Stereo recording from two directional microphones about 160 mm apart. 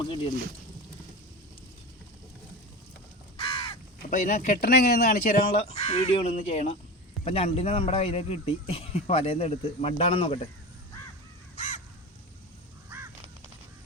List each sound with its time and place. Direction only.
0.0 s speech: 30° left (ahead or behind)
3.3 s crow: 35° left (ahead or behind)
4.0 s speech: 55° left (ahead or behind)
5.5 s speech: 45° left (ahead or behind)
11.5 s crow: 45° left (ahead or behind)